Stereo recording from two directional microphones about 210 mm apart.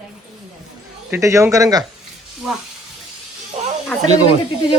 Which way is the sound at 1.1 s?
15° right (ahead or behind).